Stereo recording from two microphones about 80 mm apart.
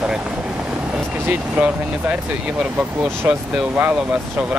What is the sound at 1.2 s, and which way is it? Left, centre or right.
Speech, centre.